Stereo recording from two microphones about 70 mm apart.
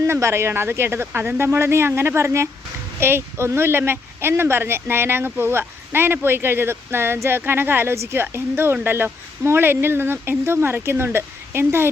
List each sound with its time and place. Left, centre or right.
0.0 s speech: right